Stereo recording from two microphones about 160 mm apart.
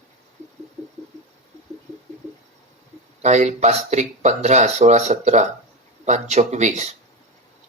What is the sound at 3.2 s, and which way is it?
Speech, 45° right (ahead or behind).